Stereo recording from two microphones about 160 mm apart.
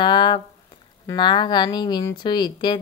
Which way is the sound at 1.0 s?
30° left (ahead or behind).